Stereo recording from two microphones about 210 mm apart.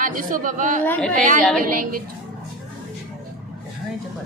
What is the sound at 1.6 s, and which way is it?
Speech, 40° right (ahead or behind).